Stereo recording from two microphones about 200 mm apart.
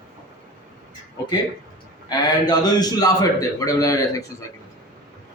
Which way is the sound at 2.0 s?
20° left (ahead or behind).